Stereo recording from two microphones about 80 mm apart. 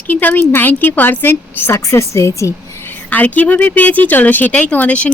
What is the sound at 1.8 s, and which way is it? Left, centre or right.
Speech, left.